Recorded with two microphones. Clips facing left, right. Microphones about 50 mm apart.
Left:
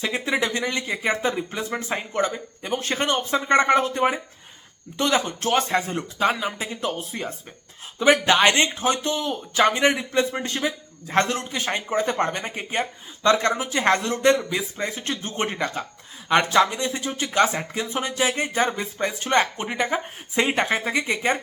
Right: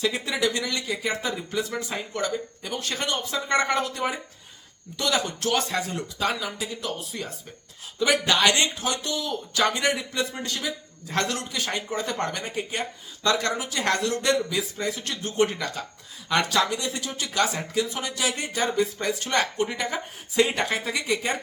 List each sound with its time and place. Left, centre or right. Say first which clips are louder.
0.0 s speech: left 1 dB; left